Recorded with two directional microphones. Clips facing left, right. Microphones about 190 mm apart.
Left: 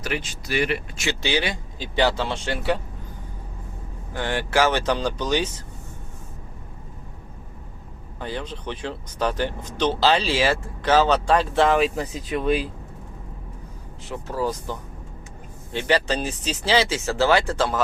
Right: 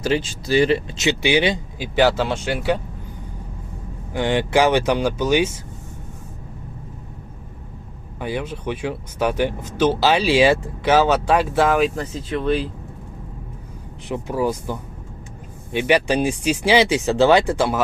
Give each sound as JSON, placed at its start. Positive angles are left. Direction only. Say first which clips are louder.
{"t": 0.0, "sound": "speech", "louder": "right 8 dB", "side_deg": -30}
{"t": 2.0, "sound": "speech", "louder": "right 4 dB", "side_deg": -5}
{"t": 4.1, "sound": "speech", "louder": "right 5 dB", "side_deg": -15}
{"t": 8.2, "sound": "speech", "louder": "right 5 dB", "side_deg": -10}
{"t": 11.9, "sound": "speech", "louder": "right 1 dB", "side_deg": 10}
{"t": 14.1, "sound": "speech", "louder": "right 4 dB", "side_deg": -15}